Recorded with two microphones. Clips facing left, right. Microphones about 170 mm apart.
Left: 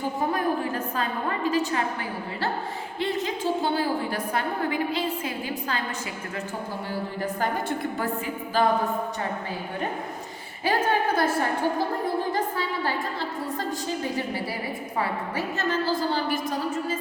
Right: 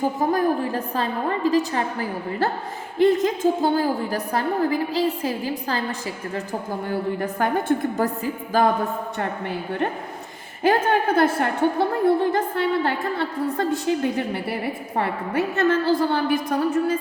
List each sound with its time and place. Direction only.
0.3 s a woman's voice: 35° right (ahead or behind)
7.9 s a woman's voice: 40° right (ahead or behind)
10.6 s a woman's voice: 55° right (ahead or behind)
14.9 s a woman's voice: 60° right (ahead or behind)